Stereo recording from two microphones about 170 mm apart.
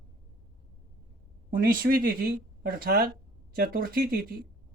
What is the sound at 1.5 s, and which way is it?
Speech, 55° right (ahead or behind).